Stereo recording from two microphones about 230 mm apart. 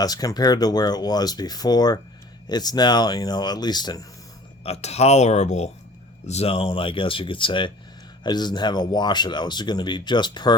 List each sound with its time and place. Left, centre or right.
0.0 s speech: centre